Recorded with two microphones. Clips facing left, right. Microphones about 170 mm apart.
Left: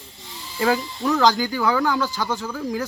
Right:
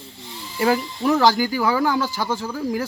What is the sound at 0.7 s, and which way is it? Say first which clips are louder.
Speech: right 2 dB; 15° right (ahead or behind).